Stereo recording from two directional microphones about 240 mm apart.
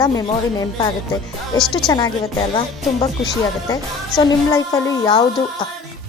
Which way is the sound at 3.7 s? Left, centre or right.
Centre.